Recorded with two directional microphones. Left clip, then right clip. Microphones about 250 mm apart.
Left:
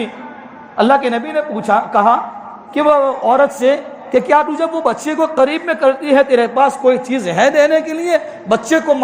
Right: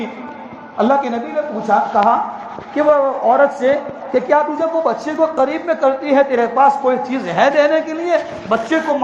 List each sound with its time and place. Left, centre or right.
0.8 s a man's voice: left